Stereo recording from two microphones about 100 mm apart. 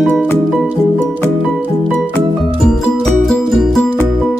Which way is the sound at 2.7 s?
5° left (ahead or behind).